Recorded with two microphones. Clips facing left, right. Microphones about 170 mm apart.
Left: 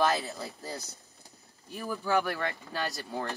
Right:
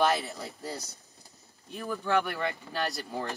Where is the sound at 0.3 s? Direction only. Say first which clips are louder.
Right 1 dB; centre (ahead or behind).